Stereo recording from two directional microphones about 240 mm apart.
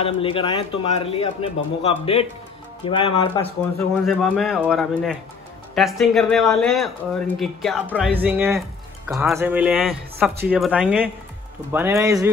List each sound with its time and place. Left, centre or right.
0.0 s a man's voice: left
4.0 s speech: centre